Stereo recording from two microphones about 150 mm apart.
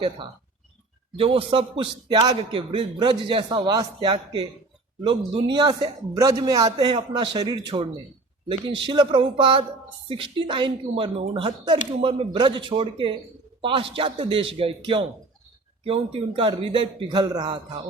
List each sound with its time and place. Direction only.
1.1 s a man's voice: 40° right (ahead or behind)